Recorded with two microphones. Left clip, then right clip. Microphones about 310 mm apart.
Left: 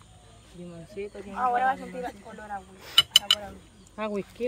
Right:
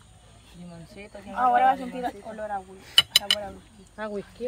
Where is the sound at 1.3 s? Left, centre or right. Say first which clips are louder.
Right 5 dB; right.